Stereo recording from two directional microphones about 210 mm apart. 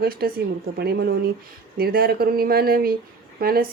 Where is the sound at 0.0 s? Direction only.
45° right (ahead or behind).